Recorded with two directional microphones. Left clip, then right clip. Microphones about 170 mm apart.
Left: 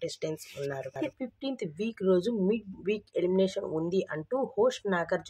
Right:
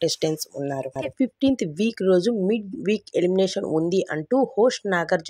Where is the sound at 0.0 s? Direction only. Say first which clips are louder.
Right 11 dB; 50° right (ahead or behind).